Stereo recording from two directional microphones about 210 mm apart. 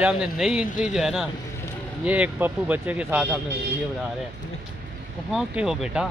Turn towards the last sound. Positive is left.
turn(degrees=0)  # may be behind; listen again after turning